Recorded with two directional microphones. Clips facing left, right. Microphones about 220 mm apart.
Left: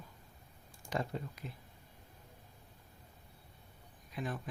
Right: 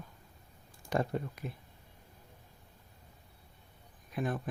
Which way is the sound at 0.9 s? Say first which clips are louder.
Right 5 dB; 55° right (ahead or behind).